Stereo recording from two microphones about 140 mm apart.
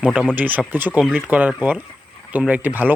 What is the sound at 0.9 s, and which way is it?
Speech, centre (ahead or behind).